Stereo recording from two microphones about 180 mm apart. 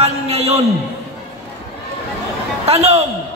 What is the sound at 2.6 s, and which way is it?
Speech, 35° right (ahead or behind).